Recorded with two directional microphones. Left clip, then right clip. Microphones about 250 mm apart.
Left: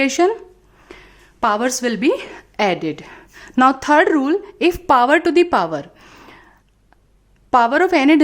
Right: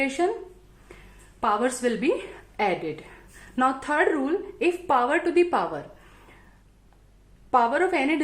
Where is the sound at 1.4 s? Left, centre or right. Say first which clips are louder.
Left 6 dB; left.